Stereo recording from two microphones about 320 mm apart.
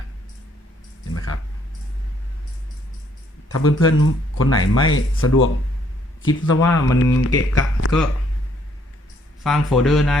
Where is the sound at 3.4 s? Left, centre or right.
Left.